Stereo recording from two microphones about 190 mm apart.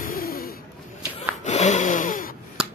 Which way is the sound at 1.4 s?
40° left (ahead or behind).